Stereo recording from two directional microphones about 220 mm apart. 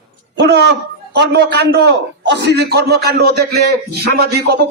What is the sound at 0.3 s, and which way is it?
A man's voice, 50° right (ahead or behind).